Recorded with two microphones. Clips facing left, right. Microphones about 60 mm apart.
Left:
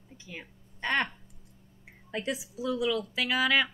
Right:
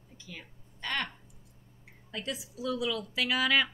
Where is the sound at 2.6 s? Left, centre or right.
Centre.